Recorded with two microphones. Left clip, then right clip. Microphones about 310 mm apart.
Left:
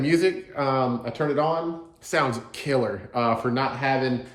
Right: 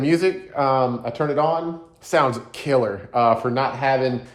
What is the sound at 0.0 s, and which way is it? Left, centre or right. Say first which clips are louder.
Speech: right 2 dB; centre.